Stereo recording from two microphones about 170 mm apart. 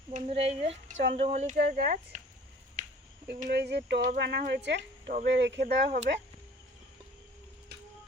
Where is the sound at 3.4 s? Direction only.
80° right.